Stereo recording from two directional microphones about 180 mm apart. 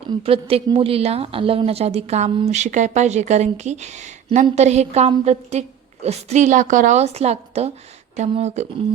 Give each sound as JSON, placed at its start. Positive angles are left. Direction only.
{"t": 0.2, "sound": "a woman's voice", "side_deg": -30}